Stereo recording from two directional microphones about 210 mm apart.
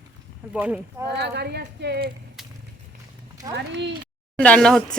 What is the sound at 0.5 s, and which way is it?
Speech, 5° right (ahead or behind).